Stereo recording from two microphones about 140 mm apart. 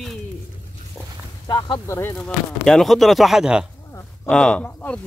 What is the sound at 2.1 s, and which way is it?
Speech, centre (ahead or behind).